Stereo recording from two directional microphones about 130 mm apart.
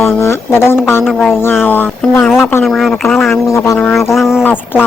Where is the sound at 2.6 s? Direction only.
Centre (ahead or behind).